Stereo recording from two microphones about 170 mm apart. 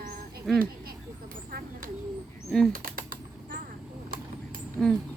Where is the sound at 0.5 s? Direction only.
Centre (ahead or behind).